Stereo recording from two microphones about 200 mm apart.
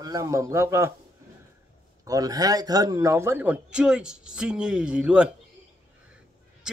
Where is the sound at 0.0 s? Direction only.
15° right (ahead or behind).